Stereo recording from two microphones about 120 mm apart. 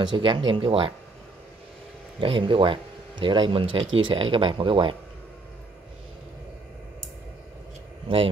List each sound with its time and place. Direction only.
0.0 s speech: 45° right (ahead or behind)
2.1 s speech: 45° right (ahead or behind)